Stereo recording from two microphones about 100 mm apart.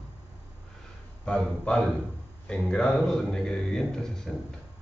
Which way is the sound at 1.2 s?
10° left (ahead or behind).